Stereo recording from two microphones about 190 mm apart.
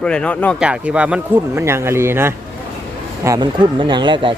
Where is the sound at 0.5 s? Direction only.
5° right (ahead or behind).